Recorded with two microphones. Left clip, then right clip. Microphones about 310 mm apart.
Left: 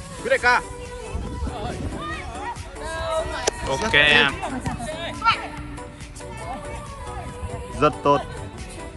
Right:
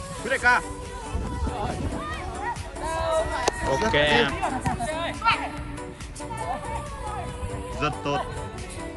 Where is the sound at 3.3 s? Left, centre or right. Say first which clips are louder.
Even; centre.